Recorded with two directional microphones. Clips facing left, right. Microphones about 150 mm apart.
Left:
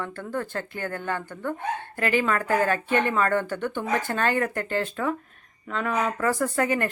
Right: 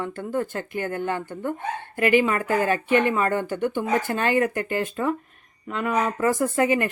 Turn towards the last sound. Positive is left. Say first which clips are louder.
# right 3 dB
turn(degrees=-15)  # may be behind; listen again after turning